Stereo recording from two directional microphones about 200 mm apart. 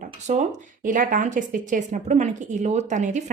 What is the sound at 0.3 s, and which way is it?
A woman's voice, 35° right (ahead or behind).